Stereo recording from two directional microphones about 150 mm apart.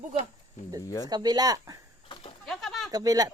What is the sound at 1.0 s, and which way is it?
Speech, 25° right (ahead or behind).